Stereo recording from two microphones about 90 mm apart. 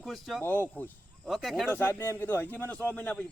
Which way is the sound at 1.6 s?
25° left (ahead or behind).